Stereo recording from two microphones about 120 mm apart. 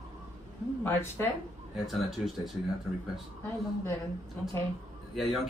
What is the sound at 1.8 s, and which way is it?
Speech, centre (ahead or behind).